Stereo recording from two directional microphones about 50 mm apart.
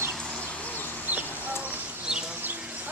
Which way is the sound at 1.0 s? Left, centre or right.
Right.